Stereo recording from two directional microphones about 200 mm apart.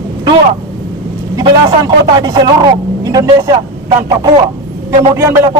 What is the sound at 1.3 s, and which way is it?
A man's voice, 20° right (ahead or behind).